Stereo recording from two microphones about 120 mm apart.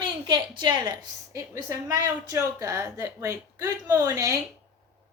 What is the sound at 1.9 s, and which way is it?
A woman's voice, 30° right (ahead or behind).